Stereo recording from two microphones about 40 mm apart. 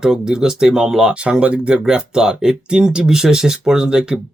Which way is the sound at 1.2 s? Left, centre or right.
Right.